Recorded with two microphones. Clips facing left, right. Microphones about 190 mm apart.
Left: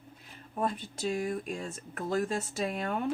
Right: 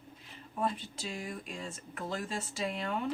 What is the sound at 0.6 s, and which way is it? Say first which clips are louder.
Speech: left 3 dB; 50° left (ahead or behind).